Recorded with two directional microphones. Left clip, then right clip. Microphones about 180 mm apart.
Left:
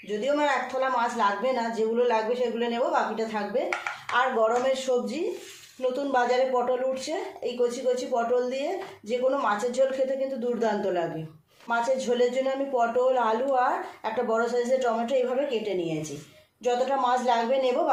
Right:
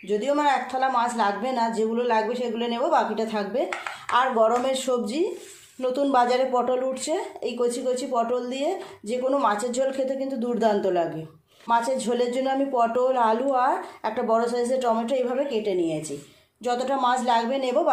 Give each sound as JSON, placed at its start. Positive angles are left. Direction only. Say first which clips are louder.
{"t": 0.1, "sound": "speech", "louder": "right 3 dB", "side_deg": -45}
{"t": 11.7, "sound": "speech", "louder": "right 2 dB", "side_deg": -45}